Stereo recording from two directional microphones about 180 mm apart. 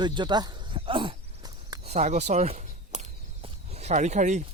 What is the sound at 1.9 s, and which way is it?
Walk, 40° right (ahead or behind).